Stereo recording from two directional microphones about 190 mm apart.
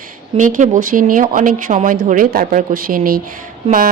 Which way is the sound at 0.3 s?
40° right (ahead or behind).